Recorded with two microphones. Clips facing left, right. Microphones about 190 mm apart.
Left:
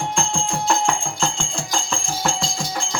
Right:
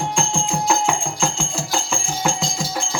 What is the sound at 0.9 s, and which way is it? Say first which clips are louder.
Music: right 1 dB; 5° right (ahead or behind).